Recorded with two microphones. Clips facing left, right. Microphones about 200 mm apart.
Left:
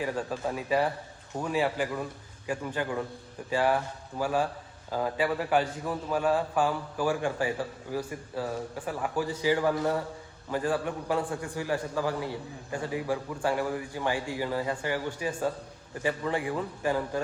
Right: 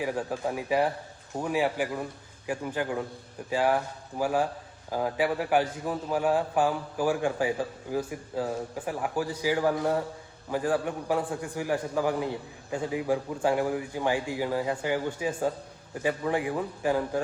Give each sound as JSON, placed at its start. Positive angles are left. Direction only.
{"t": 0.0, "sound": "a man's voice", "side_deg": -15}